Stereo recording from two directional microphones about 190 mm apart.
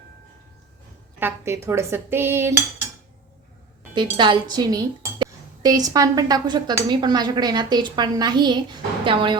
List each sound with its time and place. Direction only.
1.2 s dishes: 15° right (ahead or behind)
3.9 s speech: 25° right (ahead or behind)